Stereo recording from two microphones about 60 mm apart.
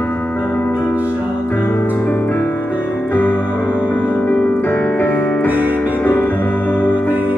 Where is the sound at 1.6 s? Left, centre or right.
Left.